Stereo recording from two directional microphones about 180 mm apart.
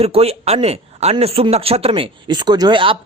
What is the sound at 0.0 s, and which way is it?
A man's voice, 35° right (ahead or behind).